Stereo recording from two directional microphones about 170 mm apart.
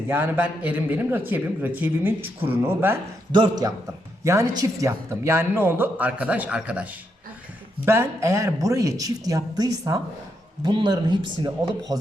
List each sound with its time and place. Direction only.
0.1 s a man's voice: 10° right (ahead or behind)
3.3 s a woman's voice: 25° right (ahead or behind)